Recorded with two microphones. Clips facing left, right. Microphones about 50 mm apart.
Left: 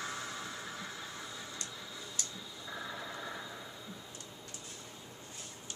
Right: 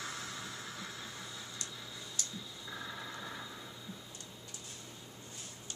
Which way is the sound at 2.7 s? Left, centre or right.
Centre.